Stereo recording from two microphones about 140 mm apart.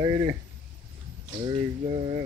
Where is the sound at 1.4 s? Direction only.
45° right (ahead or behind).